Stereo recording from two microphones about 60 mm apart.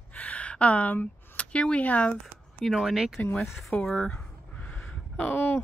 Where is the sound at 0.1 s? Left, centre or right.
Left.